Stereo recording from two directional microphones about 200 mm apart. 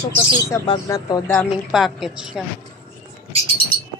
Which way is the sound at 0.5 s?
15° left (ahead or behind).